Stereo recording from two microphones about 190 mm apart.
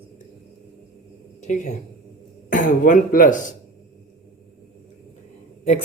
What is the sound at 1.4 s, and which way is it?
A woman's voice, 40° left (ahead or behind).